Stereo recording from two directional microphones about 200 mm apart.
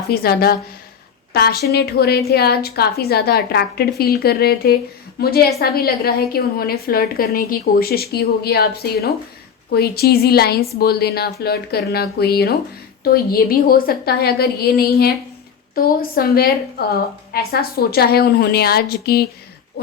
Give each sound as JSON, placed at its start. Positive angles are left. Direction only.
{"t": 0.1, "sound": "a woman's voice", "side_deg": 50}